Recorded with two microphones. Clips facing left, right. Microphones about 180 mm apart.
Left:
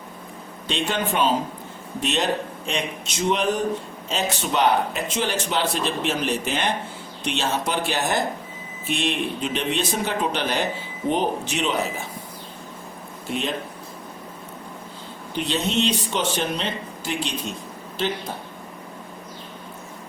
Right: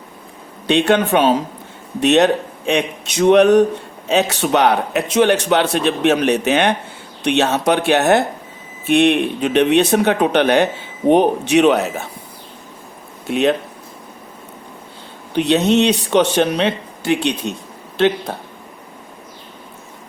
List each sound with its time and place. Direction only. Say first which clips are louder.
0.7 s a man's voice: right 11 dB; 70° right (ahead or behind)
13.2 s a man's voice: right 11 dB; 70° right (ahead or behind)
15.4 s a man's voice: right 10 dB; 70° right (ahead or behind)